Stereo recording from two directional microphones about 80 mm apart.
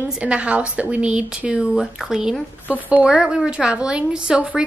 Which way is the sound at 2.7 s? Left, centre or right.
Centre.